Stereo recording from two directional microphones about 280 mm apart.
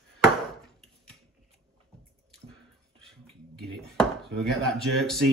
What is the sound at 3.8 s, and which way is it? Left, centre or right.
Speech, centre.